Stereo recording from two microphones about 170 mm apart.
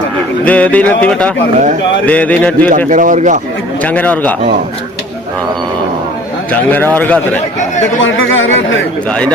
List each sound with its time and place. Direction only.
0.4 s speech: 10° left (ahead or behind)
2.7 s speech: 50° right (ahead or behind)
3.8 s speech: 10° left (ahead or behind)
6.5 s speech: 10° left (ahead or behind)
8.0 s speech: 90° left
9.0 s a man's voice: 5° left (ahead or behind)